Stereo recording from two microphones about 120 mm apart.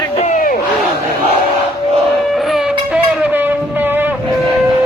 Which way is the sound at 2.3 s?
Centre (ahead or behind).